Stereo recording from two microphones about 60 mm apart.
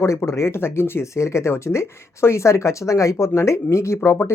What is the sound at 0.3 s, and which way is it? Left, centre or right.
Speech, left.